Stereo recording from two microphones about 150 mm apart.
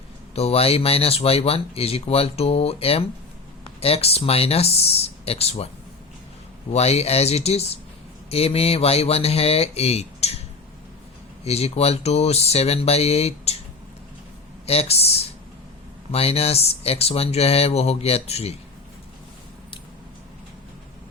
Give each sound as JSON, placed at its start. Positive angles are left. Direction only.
{"t": 0.3, "sound": "speech", "side_deg": 40}
{"t": 6.7, "sound": "speech", "side_deg": 45}
{"t": 11.4, "sound": "speech", "side_deg": 45}
{"t": 14.7, "sound": "speech", "side_deg": 45}